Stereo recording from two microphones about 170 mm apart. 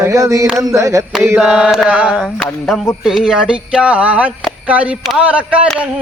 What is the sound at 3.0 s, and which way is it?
Speech, 5° right (ahead or behind).